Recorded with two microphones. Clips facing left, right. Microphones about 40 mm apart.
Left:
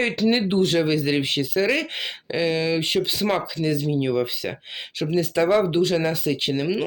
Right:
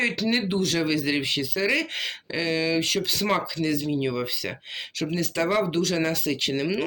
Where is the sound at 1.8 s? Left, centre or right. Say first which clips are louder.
Left 1 dB; centre.